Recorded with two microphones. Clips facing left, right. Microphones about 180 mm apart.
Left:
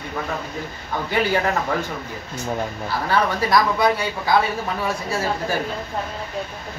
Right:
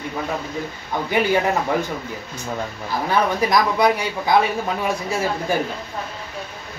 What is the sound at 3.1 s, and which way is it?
Speech, 15° right (ahead or behind).